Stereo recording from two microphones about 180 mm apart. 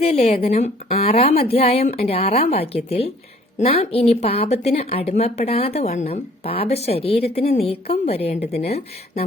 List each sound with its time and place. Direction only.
0.0 s a woman's voice: 35° left (ahead or behind)